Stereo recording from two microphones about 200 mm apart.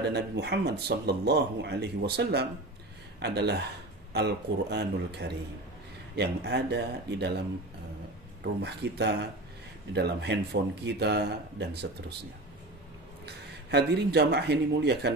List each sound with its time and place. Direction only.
0.1 s speech: 55° right (ahead or behind)
8.6 s speech: 55° right (ahead or behind)
13.2 s speech: 55° right (ahead or behind)